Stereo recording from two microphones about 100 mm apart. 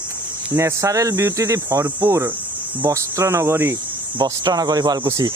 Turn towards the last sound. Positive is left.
turn(degrees=-35)  # may be behind; listen again after turning